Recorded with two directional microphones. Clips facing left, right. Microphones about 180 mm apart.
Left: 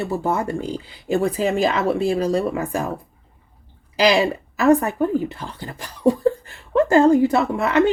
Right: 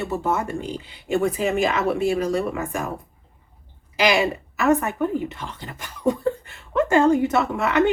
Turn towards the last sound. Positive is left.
turn(degrees=30)  # may be behind; listen again after turning